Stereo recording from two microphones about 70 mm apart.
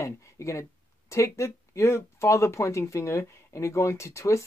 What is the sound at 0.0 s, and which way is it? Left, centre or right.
Speech, left.